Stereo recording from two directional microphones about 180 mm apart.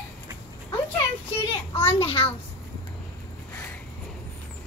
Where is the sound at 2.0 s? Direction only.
30° left (ahead or behind).